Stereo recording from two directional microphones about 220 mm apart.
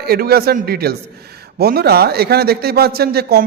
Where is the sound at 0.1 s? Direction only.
45° right (ahead or behind).